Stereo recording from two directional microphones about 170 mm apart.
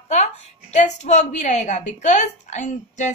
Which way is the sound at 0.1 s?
45° left (ahead or behind).